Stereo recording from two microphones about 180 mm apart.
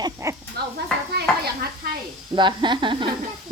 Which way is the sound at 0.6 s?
60° right (ahead or behind).